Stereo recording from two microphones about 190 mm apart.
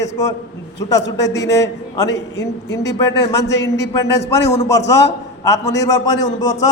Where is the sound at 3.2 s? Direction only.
15° left (ahead or behind).